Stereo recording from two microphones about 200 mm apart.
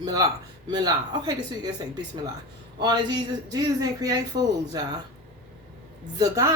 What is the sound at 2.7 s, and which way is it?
Speech, 20° right (ahead or behind).